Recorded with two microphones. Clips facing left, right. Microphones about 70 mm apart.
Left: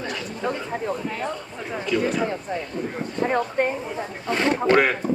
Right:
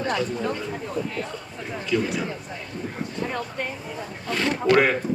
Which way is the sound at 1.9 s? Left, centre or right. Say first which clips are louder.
Left 1 dB; centre.